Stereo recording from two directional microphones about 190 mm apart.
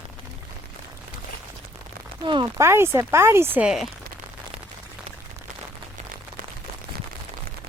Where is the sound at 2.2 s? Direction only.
25° right (ahead or behind).